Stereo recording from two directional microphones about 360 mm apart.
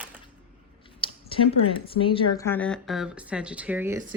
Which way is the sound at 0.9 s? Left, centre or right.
Centre.